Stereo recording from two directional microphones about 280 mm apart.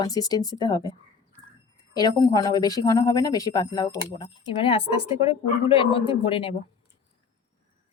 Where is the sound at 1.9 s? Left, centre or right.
Centre.